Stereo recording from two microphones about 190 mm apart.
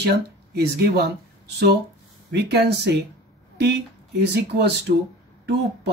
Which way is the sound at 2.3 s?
60° right (ahead or behind).